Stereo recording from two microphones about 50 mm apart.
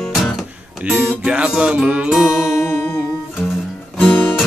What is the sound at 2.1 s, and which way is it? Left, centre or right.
Music, centre.